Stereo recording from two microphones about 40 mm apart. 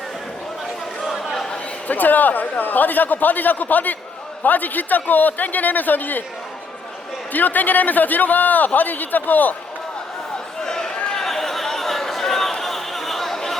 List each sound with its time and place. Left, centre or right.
1.0 s chatter: centre
1.9 s a man's voice: left
7.3 s a man's voice: left
10.6 s chatter: centre